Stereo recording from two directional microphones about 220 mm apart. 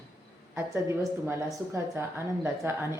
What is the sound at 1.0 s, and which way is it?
A woman's voice, 10° right (ahead or behind).